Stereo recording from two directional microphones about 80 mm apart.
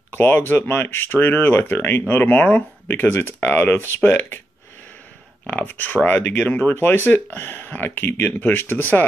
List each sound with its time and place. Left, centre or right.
0.2 s speech: left
5.5 s speech: left